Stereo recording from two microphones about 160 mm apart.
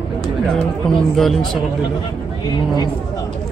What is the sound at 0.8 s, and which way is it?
Speech, 5° left (ahead or behind).